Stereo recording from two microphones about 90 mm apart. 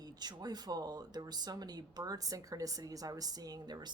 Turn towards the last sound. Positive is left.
turn(degrees=-50)  # may be behind; listen again after turning